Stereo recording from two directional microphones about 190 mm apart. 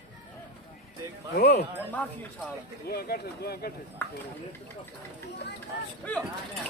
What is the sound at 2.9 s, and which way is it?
Speech, 55° left (ahead or behind).